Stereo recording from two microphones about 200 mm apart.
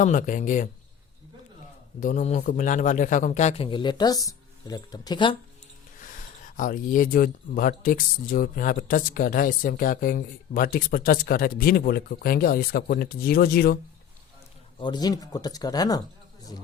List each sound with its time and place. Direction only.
0.0 s a man's voice: 40° left (ahead or behind)
2.0 s a man's voice: 40° left (ahead or behind); by 5.4 s 25° left (ahead or behind)
6.4 s speech: 40° left (ahead or behind)
14.8 s speech: 20° left (ahead or behind)